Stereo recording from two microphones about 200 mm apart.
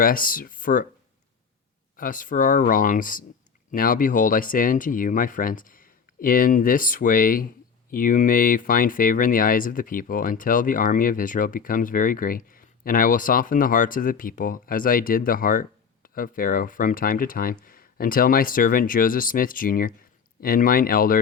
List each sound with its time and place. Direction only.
0.0 s speech: 45° left (ahead or behind)
2.0 s speech: 45° left (ahead or behind)